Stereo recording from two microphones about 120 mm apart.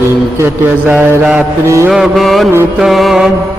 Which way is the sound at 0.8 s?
10° right (ahead or behind).